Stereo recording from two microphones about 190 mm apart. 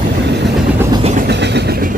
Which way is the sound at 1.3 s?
65° right (ahead or behind).